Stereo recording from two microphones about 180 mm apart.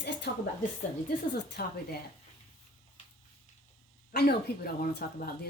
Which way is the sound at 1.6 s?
55° left (ahead or behind).